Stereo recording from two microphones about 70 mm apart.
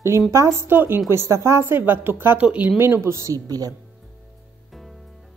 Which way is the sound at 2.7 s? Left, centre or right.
Right.